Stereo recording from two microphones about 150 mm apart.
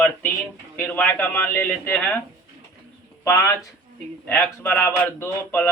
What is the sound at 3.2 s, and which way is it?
Speech, 15° left (ahead or behind).